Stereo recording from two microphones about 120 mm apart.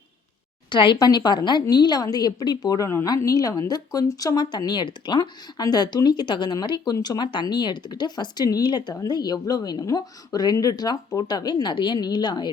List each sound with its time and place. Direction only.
0.7 s speech: 40° left (ahead or behind)